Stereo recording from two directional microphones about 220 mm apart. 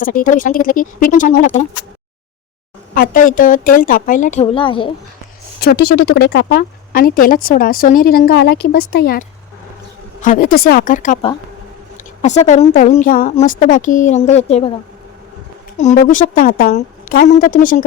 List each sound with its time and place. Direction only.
0.0 s a woman's voice: 40° left (ahead or behind)
2.9 s a woman's voice: 40° left (ahead or behind); by 4.9 s 25° left (ahead or behind)
5.5 s a woman's voice: 45° left (ahead or behind)
12.2 s a woman's voice: 30° left (ahead or behind)
15.8 s a woman's voice: 35° left (ahead or behind)